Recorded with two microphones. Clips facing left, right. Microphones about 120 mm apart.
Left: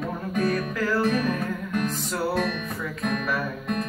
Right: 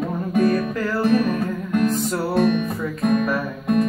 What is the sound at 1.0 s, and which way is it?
Music, 25° right (ahead or behind).